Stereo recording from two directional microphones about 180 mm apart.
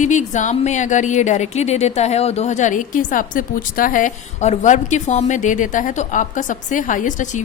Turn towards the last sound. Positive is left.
turn(degrees=45)  # may be behind; listen again after turning